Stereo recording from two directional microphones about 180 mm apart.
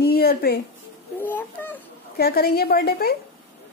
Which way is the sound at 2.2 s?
60° left (ahead or behind).